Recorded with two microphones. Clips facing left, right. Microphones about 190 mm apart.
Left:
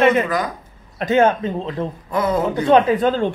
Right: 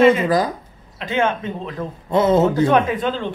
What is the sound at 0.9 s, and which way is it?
Speech, 45° left (ahead or behind).